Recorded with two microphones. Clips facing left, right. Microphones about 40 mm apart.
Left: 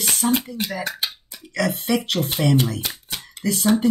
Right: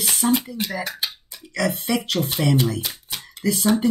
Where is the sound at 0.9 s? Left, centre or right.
Centre.